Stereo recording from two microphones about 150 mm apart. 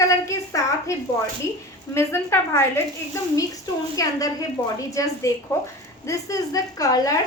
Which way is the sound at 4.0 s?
25° left (ahead or behind).